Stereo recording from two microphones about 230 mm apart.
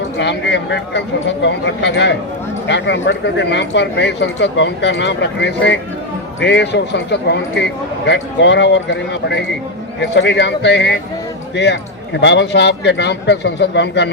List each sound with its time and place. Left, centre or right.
0.2 s speech: left